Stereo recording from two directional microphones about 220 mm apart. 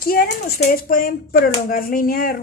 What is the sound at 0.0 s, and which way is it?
A woman's voice, 40° left (ahead or behind).